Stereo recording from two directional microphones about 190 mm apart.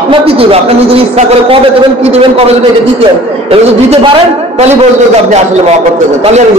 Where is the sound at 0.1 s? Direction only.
30° right (ahead or behind).